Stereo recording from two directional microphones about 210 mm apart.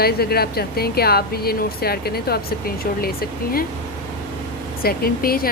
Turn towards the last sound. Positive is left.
turn(degrees=45)  # may be behind; listen again after turning